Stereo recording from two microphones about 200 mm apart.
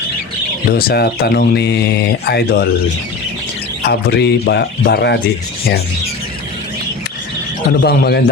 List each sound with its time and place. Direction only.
0.7 s speech: 50° left (ahead or behind)
3.8 s speech: 55° left (ahead or behind)
7.7 s speech: 50° left (ahead or behind)